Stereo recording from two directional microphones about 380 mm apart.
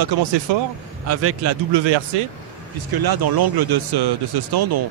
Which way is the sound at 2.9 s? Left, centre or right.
Right.